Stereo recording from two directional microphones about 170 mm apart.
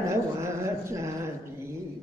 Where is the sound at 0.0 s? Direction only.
15° right (ahead or behind).